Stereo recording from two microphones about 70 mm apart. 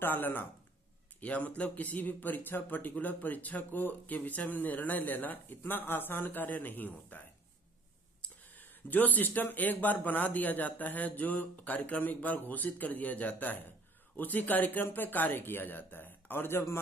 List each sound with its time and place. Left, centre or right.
0.0 s a man's voice: left